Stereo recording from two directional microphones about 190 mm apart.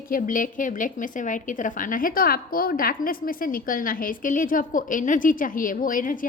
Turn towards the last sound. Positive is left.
turn(degrees=45)  # may be behind; listen again after turning